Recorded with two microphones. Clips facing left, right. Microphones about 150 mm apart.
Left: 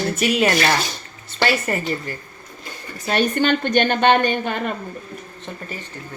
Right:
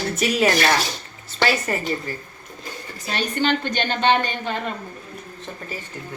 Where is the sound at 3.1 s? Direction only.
55° left (ahead or behind).